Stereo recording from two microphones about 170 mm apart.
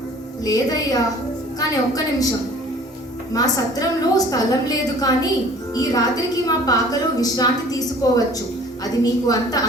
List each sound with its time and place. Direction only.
0.4 s a woman's voice: 20° left (ahead or behind)
3.3 s a woman's voice: 20° left (ahead or behind)